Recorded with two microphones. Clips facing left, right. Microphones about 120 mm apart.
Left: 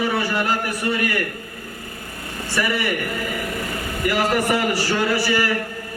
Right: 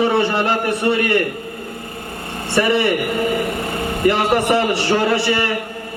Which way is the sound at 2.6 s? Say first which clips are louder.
Right 7 dB; 25° right (ahead or behind).